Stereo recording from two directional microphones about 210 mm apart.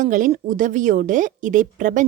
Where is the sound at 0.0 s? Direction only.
35° right (ahead or behind).